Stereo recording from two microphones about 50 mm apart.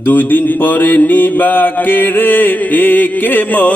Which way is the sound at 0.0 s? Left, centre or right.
Left.